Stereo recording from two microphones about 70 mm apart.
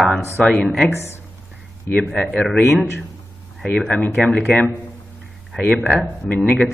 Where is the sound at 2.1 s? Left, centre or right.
Centre.